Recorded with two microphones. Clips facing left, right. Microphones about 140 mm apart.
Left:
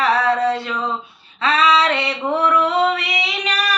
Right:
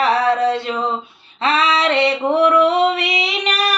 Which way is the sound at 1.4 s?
25° right (ahead or behind).